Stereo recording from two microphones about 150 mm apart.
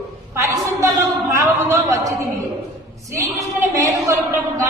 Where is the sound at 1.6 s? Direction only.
20° right (ahead or behind).